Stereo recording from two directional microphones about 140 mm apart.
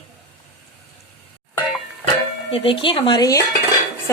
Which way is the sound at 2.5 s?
40° left (ahead or behind).